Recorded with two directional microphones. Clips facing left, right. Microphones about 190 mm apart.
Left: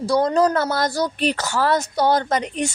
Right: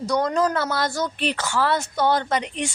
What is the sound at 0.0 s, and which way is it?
A woman's voice, 30° left (ahead or behind).